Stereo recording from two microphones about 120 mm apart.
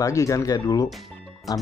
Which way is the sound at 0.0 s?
25° left (ahead or behind).